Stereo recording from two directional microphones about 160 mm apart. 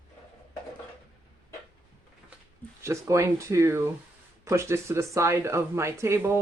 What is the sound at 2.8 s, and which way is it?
Speech, 20° right (ahead or behind).